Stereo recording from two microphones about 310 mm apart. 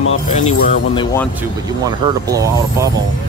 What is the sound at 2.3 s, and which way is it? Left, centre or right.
Speech, centre.